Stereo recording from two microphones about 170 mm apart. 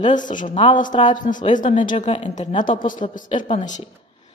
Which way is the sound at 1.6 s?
30° left (ahead or behind).